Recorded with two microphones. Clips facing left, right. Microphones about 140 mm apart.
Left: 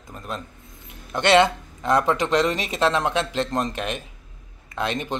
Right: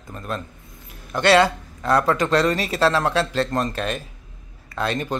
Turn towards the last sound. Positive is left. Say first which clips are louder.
# right 2 dB
turn(degrees=20)  # may be behind; listen again after turning